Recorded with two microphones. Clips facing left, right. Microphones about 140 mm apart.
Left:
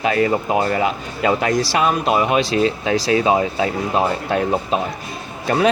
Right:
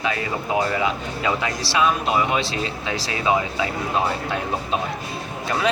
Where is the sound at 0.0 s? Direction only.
40° left (ahead or behind).